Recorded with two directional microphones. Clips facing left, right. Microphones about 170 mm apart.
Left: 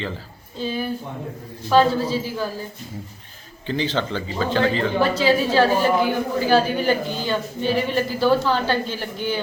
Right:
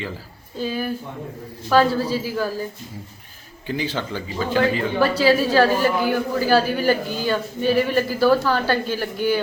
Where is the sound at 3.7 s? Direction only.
10° right (ahead or behind).